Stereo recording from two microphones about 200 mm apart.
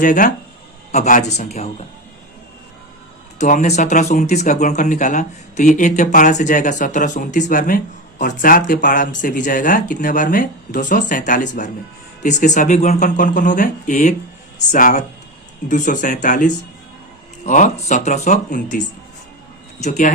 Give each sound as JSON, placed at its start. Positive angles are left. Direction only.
{"t": 0.0, "sound": "speech", "side_deg": 40}
{"t": 3.3, "sound": "speech", "side_deg": 40}
{"t": 19.8, "sound": "speech", "side_deg": 35}